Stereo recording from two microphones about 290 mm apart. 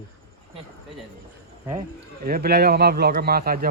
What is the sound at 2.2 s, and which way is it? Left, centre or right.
A man's voice, right.